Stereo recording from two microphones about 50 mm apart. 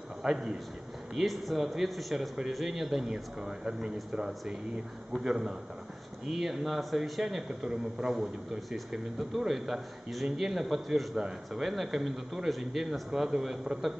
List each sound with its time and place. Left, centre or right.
0.2 s a man's voice: centre
1.1 s a man's voice: centre
2.1 s a man's voice: centre
9.4 s a man's voice: centre
11.1 s speech: centre
11.6 s a man's voice: centre